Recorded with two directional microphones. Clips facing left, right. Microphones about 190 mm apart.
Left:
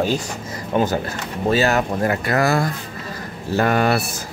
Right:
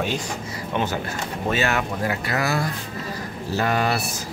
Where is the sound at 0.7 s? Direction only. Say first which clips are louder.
Left 6 dB; 40° left (ahead or behind); by 4.0 s 55° left (ahead or behind).